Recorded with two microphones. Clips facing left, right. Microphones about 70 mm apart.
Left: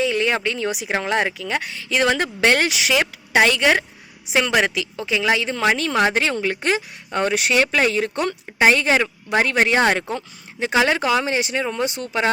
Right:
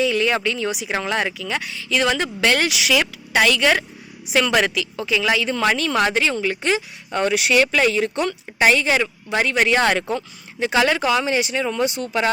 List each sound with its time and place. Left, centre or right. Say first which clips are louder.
0.0 s speech: right 1 dB; left
0.7 s speech: even; left
0.9 s speech: left 3 dB; left
6.1 s speech: even; left
9.7 s speech: even; left
11.6 s speech: right 2 dB; left